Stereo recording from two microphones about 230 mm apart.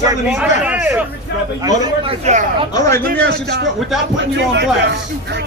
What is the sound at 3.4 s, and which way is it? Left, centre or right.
Speech, right.